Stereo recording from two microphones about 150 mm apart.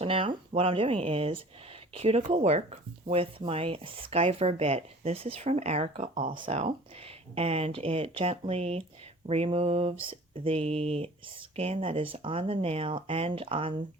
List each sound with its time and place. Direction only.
0.0 s speech: 35° right (ahead or behind)